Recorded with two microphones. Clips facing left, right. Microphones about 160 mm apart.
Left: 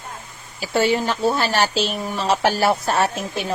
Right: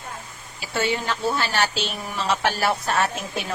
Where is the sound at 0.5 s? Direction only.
35° left (ahead or behind).